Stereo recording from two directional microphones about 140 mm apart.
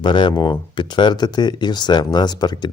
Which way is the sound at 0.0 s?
35° left (ahead or behind).